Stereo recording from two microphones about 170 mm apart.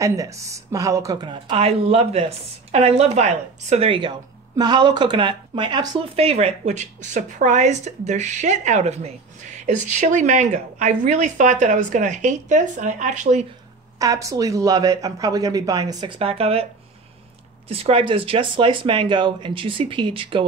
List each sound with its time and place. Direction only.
0.0 s speech: 20° right (ahead or behind); by 13.5 s 45° right (ahead or behind)
13.9 s speech: 20° right (ahead or behind); by 16.6 s 35° right (ahead or behind)
17.6 s speech: 35° right (ahead or behind)